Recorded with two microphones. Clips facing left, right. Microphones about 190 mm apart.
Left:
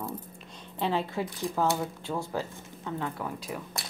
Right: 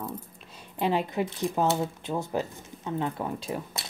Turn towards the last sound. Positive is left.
turn(degrees=-25)  # may be behind; listen again after turning